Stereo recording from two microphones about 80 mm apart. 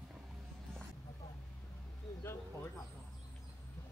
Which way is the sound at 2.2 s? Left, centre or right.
Left.